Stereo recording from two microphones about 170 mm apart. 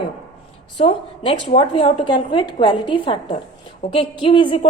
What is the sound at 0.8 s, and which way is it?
A woman's voice, 35° left (ahead or behind).